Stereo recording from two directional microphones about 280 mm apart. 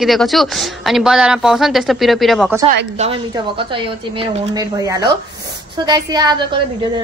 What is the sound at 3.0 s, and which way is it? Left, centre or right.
A woman's voice, centre.